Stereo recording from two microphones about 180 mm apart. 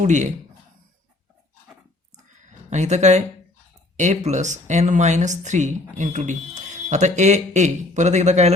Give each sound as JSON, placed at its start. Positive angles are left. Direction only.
{"t": 0.0, "sound": "speech", "side_deg": -40}
{"t": 2.6, "sound": "speech", "side_deg": -40}